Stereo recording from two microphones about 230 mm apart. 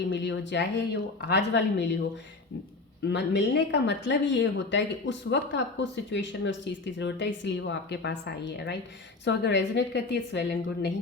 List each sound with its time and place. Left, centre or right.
0.1 s speech: left
3.1 s speech: left